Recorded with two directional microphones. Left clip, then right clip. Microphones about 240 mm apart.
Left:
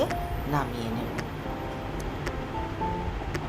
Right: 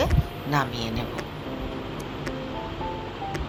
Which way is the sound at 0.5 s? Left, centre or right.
Centre.